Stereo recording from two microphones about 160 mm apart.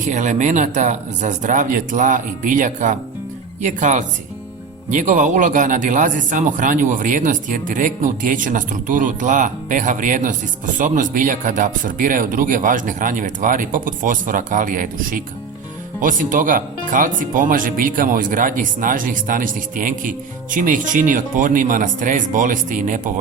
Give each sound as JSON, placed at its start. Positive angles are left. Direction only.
{"t": 0.0, "sound": "a man's voice", "side_deg": -50}